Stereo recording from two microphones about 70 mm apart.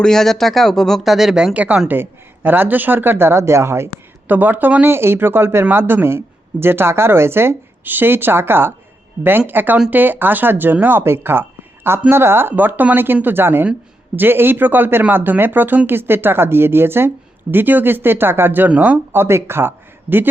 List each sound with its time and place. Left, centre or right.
0.0 s speech: centre
1.5 s speech: centre; by 3.8 s right
4.3 s speech: right